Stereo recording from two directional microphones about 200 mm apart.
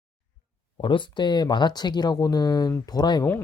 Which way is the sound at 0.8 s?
25° left (ahead or behind).